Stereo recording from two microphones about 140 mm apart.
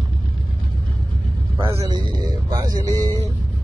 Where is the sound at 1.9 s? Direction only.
30° right (ahead or behind).